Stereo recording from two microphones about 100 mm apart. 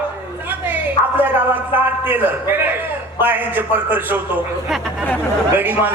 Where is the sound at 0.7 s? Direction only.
20° right (ahead or behind).